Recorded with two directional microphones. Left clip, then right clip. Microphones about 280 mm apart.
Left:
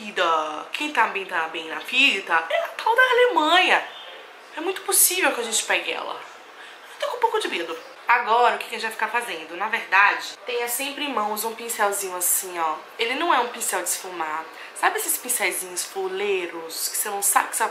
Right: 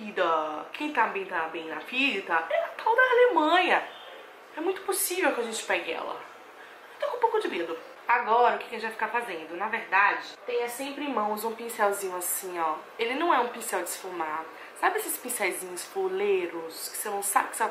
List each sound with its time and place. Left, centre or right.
0.0 s a sound: centre
0.6 s speech: centre
7.2 s a woman's voice: centre